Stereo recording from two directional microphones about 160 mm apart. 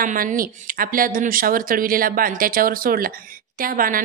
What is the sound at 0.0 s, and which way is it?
Speech, 60° right (ahead or behind).